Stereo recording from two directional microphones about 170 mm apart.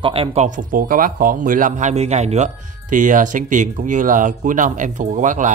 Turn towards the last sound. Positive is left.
turn(degrees=-50)  # may be behind; listen again after turning